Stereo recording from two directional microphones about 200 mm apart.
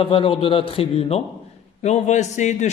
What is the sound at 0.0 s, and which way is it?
A man's voice, 25° left (ahead or behind).